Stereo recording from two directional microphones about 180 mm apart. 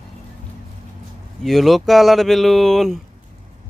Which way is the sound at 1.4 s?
Centre (ahead or behind).